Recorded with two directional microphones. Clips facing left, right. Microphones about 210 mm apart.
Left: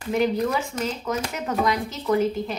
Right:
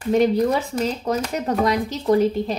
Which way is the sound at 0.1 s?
35° right (ahead or behind).